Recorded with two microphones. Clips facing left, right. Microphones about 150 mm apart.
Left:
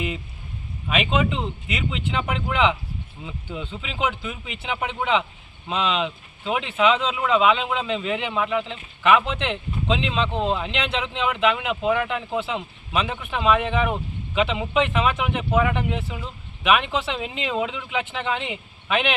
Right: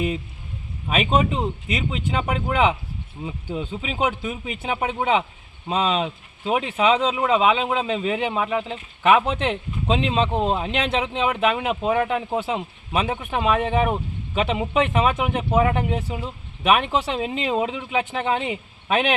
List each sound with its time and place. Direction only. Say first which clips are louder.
0.9 s speech: right 2 dB; 40° right (ahead or behind)